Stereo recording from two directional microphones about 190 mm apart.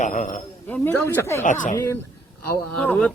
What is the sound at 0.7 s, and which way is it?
Speech, 10° left (ahead or behind).